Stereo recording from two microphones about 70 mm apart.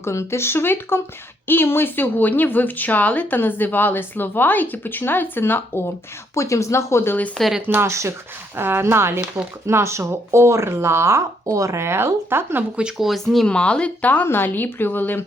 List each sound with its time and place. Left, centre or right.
0.0 s speech: left
6.3 s speech: left
7.7 s speech: right
8.5 s speech: right
13.0 s speech: centre
13.5 s speech: centre